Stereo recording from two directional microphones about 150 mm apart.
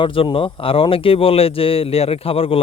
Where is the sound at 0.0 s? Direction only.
35° left (ahead or behind).